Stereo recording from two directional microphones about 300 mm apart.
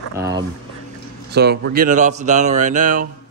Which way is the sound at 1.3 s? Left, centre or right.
Right.